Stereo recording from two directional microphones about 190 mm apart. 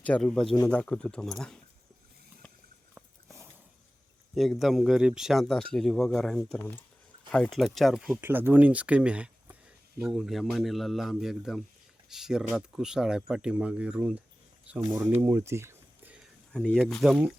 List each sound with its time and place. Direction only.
0.0 s speech: 5° left (ahead or behind)
4.4 s speech: centre (ahead or behind)
15.2 s a sound: 10° right (ahead or behind)
16.5 s speech: 5° left (ahead or behind)